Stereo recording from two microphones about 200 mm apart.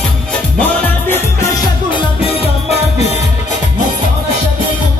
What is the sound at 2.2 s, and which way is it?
Music, 30° left (ahead or behind).